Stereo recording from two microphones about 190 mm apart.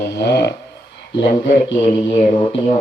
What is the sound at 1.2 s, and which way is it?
Speech, 45° left (ahead or behind).